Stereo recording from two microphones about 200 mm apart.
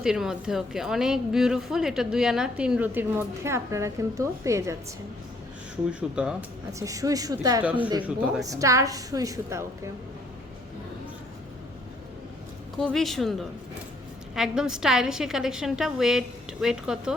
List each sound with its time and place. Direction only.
0.0 s a woman's voice: 5° right (ahead or behind)
5.9 s a woman's voice: 5° right (ahead or behind)
6.7 s a woman's voice: 15° right (ahead or behind)
7.6 s a woman's voice: 5° right (ahead or behind)
12.7 s a woman's voice: centre (ahead or behind)